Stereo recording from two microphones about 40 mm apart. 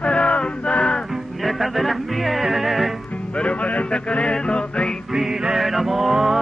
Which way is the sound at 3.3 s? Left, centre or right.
Left.